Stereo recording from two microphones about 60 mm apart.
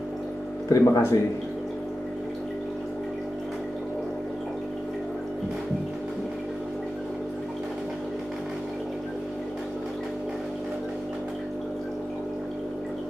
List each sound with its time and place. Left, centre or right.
0.7 s speech: left